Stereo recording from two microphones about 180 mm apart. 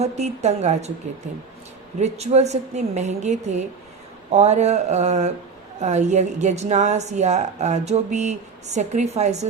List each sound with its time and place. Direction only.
0.0 s a woman's voice: 40° right (ahead or behind)
2.0 s a woman's voice: 35° right (ahead or behind)